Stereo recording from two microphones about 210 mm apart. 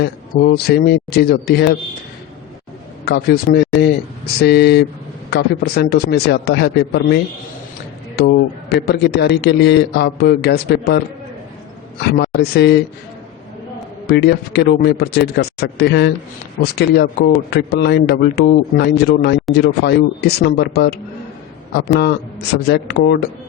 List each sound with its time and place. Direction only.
0.0 s speech: 50° left (ahead or behind)
3.0 s a man's voice: 50° left (ahead or behind)
8.7 s speech: 50° left (ahead or behind)
14.1 s speech: 50° left (ahead or behind)